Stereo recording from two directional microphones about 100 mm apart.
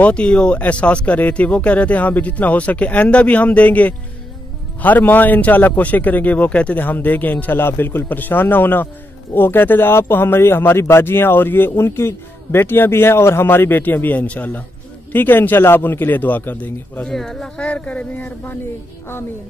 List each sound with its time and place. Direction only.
0.0 s a man's voice: 10° left (ahead or behind)
17.1 s a man's voice: 5° left (ahead or behind)